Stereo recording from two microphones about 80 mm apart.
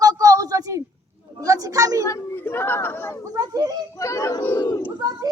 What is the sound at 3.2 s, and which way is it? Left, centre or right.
Speech, right.